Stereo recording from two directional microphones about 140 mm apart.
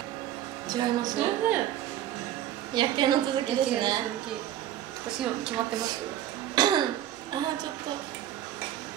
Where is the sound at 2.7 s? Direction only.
30° right (ahead or behind).